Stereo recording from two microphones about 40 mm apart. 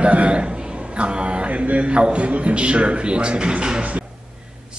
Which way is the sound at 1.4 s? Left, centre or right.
Right.